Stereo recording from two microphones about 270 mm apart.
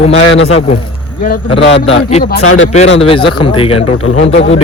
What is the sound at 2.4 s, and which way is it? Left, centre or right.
Speech, left.